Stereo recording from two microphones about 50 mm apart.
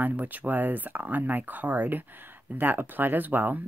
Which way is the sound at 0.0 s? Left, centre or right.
Right.